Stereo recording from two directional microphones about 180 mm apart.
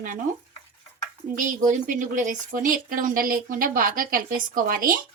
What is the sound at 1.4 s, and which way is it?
Speech, 45° right (ahead or behind).